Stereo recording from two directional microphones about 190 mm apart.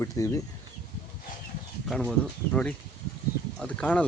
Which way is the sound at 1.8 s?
5° left (ahead or behind).